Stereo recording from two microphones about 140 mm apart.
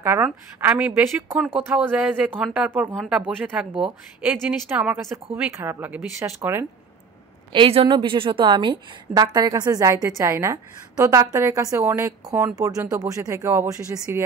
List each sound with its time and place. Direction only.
0.0 s speech: 15° right (ahead or behind)
2.9 s speech: centre (ahead or behind)
3.2 s a woman's voice: 10° right (ahead or behind)
7.5 s a woman's voice: 40° right (ahead or behind); by 14.2 s 20° right (ahead or behind)